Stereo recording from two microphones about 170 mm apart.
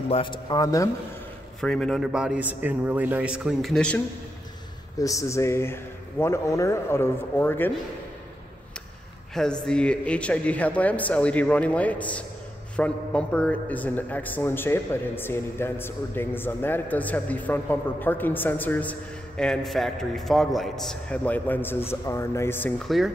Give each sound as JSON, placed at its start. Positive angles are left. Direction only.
{"t": 0.1, "sound": "speech", "side_deg": 30}
{"t": 1.6, "sound": "a man's voice", "side_deg": 5}
{"t": 4.9, "sound": "a man's voice", "side_deg": 20}
{"t": 9.3, "sound": "a man's voice", "side_deg": 5}
{"t": 22.8, "sound": "a man's voice", "side_deg": 0}